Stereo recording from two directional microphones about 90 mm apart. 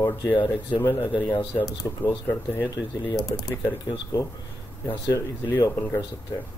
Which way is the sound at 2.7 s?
45° left (ahead or behind).